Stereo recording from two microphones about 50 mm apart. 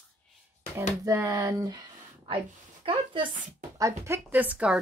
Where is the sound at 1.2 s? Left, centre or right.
Right.